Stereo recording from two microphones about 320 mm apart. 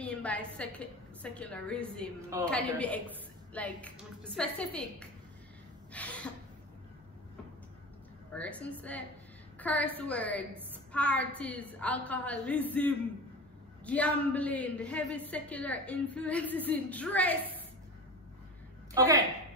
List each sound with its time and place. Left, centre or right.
0.0 s a woman's voice: centre
5.9 s a sound: centre
8.3 s a man's voice: centre